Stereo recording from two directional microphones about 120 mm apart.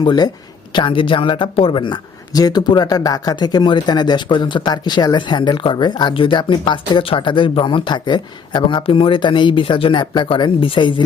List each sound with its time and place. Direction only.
0.0 s speech: 40° left (ahead or behind)